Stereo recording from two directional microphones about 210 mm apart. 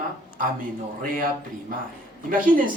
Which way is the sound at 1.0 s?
40° right (ahead or behind).